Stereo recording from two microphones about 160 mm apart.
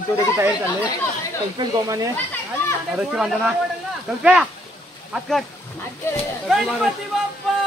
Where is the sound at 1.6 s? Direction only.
25° right (ahead or behind).